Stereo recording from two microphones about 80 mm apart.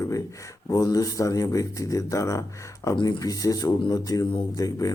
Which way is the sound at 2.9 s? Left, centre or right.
Left.